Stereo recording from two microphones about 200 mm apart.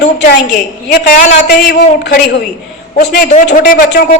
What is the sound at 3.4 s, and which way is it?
Speech, 55° left (ahead or behind).